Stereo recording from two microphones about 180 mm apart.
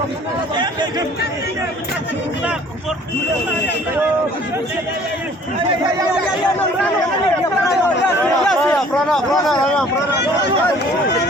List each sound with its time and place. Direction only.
0.5 s chatter: 25° right (ahead or behind)
8.2 s speech: centre (ahead or behind)